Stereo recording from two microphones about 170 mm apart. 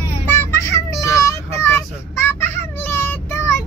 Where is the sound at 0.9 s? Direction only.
20° left (ahead or behind).